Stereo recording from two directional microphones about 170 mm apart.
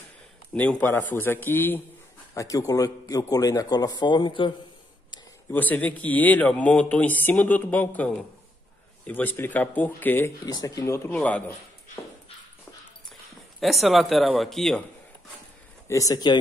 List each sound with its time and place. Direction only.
0.6 s a man's voice: 10° left (ahead or behind); by 4.6 s 30° left (ahead or behind)
5.5 s a man's voice: 10° left (ahead or behind)
10.4 s a man's voice: 25° left (ahead or behind)
10.8 s a man's voice: 10° left (ahead or behind)
13.6 s speech: centre (ahead or behind)
15.9 s a man's voice: 20° left (ahead or behind)